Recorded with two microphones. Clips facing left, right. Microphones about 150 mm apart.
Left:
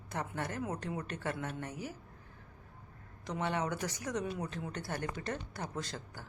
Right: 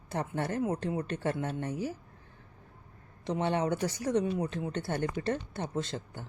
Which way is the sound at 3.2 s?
30° right (ahead or behind).